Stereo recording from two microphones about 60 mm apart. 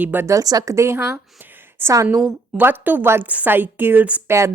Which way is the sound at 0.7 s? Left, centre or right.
Right.